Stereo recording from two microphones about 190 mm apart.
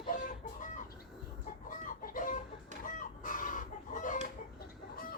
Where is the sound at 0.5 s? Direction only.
40° left (ahead or behind).